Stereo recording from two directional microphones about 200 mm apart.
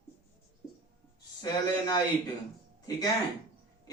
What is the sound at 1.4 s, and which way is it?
Speech, 20° left (ahead or behind).